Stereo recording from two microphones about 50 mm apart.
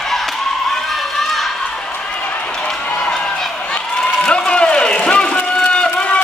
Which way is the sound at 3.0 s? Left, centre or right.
Centre.